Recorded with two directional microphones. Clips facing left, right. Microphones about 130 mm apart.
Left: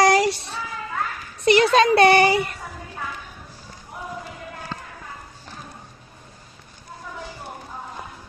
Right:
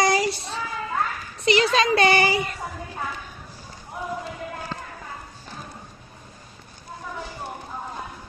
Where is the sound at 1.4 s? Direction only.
55° left (ahead or behind).